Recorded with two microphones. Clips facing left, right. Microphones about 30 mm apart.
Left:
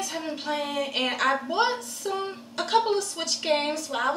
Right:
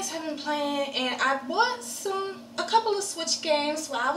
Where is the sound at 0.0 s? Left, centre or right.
Centre.